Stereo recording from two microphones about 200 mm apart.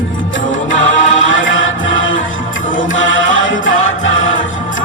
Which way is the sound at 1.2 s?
75° left (ahead or behind).